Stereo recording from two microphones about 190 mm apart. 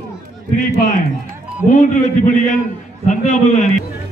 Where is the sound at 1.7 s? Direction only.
40° left (ahead or behind).